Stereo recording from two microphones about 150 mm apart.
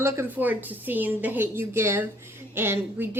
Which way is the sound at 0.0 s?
15° right (ahead or behind).